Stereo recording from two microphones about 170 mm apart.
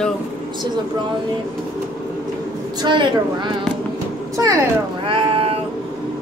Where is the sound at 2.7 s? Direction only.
25° right (ahead or behind).